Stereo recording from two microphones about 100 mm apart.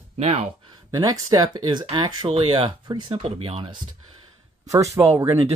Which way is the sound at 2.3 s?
70° right (ahead or behind).